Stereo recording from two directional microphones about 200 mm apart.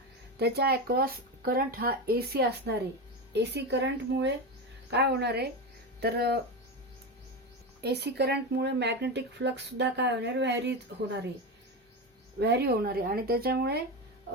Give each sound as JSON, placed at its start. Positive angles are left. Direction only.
{"t": 0.3, "sound": "speech", "side_deg": -55}
{"t": 7.8, "sound": "speech", "side_deg": -55}
{"t": 12.4, "sound": "speech", "side_deg": -55}